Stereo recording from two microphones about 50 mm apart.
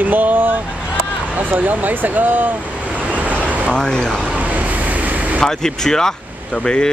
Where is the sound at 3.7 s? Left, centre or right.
Centre.